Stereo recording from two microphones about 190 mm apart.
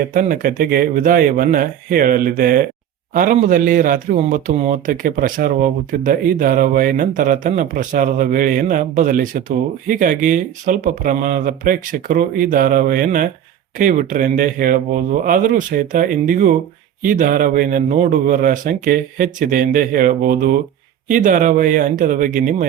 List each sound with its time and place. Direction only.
0.0 s speech: 45° right (ahead or behind)